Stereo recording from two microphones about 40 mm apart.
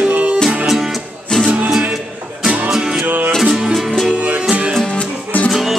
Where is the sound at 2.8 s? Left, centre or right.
Right.